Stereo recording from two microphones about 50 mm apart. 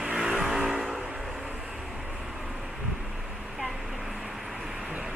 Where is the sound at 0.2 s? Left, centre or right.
Centre.